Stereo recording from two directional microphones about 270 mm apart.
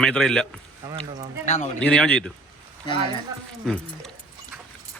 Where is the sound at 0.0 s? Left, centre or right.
Centre.